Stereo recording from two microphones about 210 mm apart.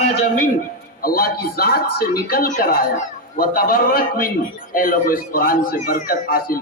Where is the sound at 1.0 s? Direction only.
45° left (ahead or behind).